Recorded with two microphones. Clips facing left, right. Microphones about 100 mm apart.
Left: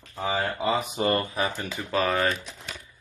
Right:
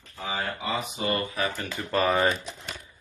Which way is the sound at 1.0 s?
45° left (ahead or behind).